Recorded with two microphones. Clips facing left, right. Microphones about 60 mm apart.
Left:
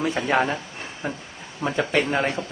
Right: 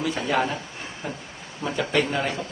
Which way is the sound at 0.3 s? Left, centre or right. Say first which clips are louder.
Left 2 dB; left.